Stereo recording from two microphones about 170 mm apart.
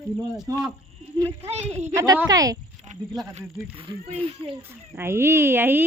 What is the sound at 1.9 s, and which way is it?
Speech, 15° right (ahead or behind).